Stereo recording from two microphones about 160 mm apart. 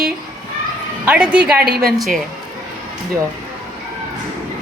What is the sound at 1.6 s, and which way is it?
Speech, 75° right (ahead or behind).